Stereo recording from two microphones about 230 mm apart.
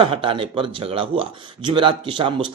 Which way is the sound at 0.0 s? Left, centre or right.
Right.